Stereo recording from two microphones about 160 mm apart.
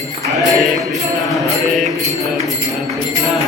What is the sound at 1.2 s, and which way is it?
Mantra, centre (ahead or behind).